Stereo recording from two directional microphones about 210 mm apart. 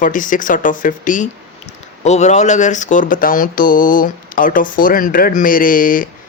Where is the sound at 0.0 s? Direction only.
40° left (ahead or behind).